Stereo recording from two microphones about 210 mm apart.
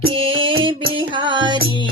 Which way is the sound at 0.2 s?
25° right (ahead or behind).